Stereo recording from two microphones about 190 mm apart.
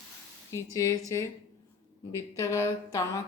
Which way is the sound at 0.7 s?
15° left (ahead or behind).